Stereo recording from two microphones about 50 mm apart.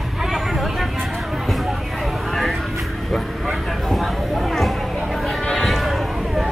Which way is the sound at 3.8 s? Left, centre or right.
Centre.